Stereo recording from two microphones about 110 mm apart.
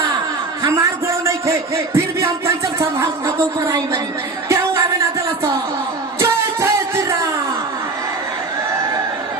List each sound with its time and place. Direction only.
0.6 s a sound: 25° right (ahead or behind)
2.7 s a woman's voice: 25° right (ahead or behind)
4.4 s music: 25° right (ahead or behind)